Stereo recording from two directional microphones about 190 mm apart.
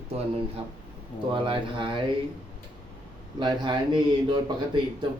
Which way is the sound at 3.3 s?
25° right (ahead or behind).